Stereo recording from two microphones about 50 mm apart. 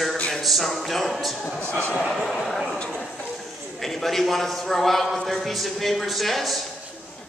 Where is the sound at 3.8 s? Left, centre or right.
Centre.